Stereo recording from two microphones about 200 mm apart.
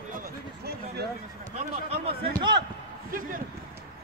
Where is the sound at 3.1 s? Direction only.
45° right (ahead or behind).